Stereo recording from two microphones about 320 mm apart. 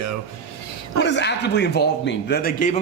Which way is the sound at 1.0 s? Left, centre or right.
Left.